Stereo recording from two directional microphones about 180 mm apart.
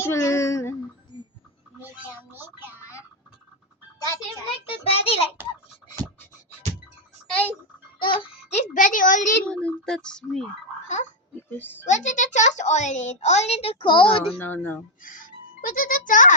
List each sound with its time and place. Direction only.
0.0 s speech: 15° left (ahead or behind)
1.1 s a sound: 25° left (ahead or behind)
2.3 s speech: 10° right (ahead or behind)
4.0 s a child's voice: 20° left (ahead or behind)
4.8 s a child's voice: 35° left (ahead or behind)
7.9 s babbling: 25° left (ahead or behind)
8.7 s a woman's voice: 45° left (ahead or behind)
9.5 s speech: 5° left (ahead or behind)
10.8 s a child's voice: 40° left (ahead or behind)
11.5 s speech: 10° left (ahead or behind)
11.9 s a child's voice: 40° left (ahead or behind)
14.3 s speech: 10° left (ahead or behind)
15.0 s a child's voice: 50° left (ahead or behind)